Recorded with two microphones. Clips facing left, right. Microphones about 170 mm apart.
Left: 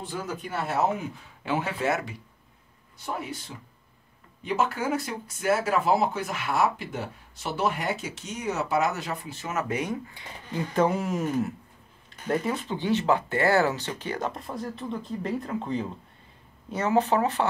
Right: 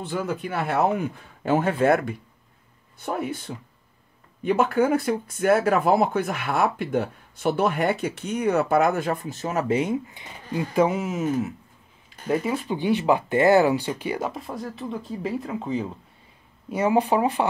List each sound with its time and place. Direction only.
0.1 s speech: 65° right (ahead or behind); by 10.6 s 20° right (ahead or behind)
10.7 s speech: 5° right (ahead or behind)